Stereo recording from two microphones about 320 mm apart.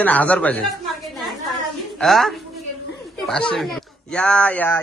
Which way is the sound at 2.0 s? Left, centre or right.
Centre.